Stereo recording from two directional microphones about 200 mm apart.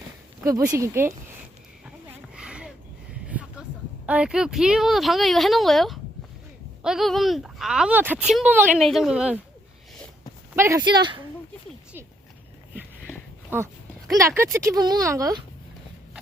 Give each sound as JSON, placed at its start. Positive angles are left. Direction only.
{"t": 0.4, "sound": "speech", "side_deg": -15}
{"t": 2.3, "sound": "a sound", "side_deg": -5}
{"t": 4.0, "sound": "speech", "side_deg": -5}
{"t": 10.5, "sound": "speech", "side_deg": -15}
{"t": 13.5, "sound": "speech", "side_deg": -10}